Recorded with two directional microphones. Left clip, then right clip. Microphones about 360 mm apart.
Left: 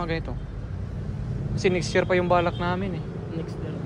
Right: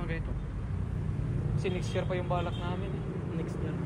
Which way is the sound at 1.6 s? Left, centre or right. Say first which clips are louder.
Left 12 dB; centre.